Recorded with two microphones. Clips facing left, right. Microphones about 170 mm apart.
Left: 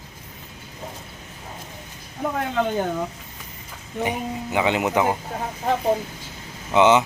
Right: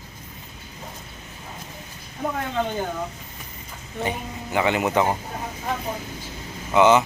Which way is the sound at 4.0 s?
15° left (ahead or behind).